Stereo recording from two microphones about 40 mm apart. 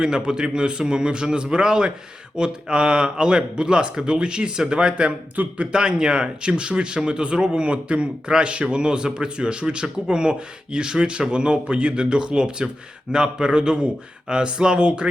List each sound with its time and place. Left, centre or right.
0.0 s speech: centre
5.4 s speech: right
5.7 s speech: centre